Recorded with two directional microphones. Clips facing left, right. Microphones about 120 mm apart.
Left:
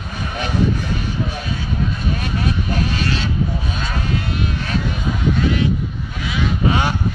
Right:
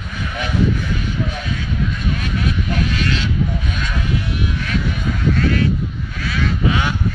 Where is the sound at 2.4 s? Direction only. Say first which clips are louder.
Even; 35° left (ahead or behind).